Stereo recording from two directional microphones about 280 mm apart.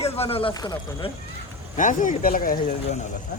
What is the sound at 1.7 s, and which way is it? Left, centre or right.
Speech, left.